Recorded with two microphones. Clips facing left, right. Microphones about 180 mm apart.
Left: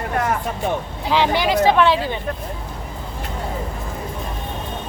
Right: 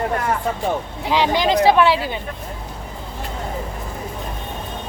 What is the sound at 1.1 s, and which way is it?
Speech, 15° right (ahead or behind).